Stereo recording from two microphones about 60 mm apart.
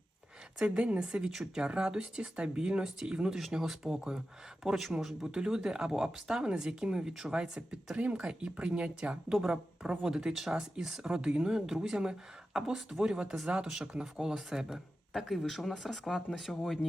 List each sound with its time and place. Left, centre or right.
0.6 s speech: centre